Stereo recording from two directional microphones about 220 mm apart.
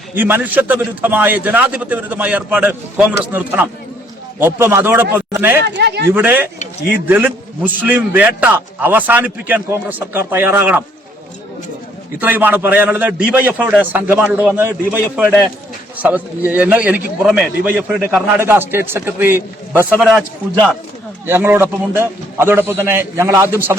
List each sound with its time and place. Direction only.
0.1 s a man's voice: 10° right (ahead or behind)
5.6 s speech: 50° right (ahead or behind)
6.1 s a man's voice: 5° right (ahead or behind)
12.2 s a man's voice: 10° right (ahead or behind)
19.9 s a man's voice: centre (ahead or behind)
21.2 s a man's voice: 10° right (ahead or behind)